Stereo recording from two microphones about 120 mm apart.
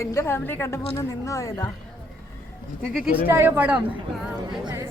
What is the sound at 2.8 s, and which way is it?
Speech, 5° left (ahead or behind).